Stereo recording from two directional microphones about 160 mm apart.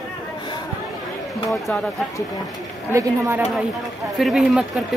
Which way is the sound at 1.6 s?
5° left (ahead or behind).